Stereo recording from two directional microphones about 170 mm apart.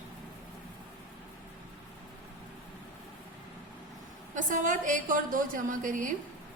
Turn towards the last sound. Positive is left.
turn(degrees=-50)  # may be behind; listen again after turning